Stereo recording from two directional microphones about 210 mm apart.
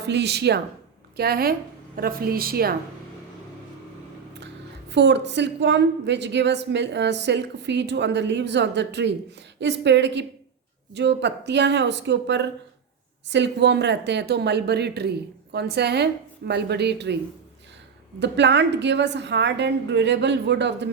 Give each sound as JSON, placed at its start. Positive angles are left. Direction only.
{"t": 0.0, "sound": "a woman's voice", "side_deg": -55}
{"t": 4.9, "sound": "a woman's voice", "side_deg": -55}
{"t": 18.2, "sound": "a woman's voice", "side_deg": -55}